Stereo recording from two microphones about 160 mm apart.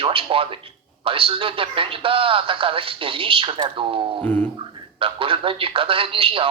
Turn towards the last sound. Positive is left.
turn(degrees=-35)  # may be behind; listen again after turning